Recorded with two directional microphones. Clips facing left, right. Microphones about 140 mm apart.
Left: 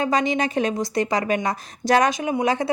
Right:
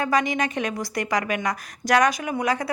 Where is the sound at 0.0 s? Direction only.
25° left (ahead or behind).